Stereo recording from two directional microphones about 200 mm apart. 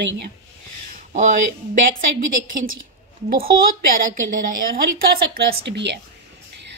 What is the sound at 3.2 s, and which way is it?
A woman's voice, 50° right (ahead or behind).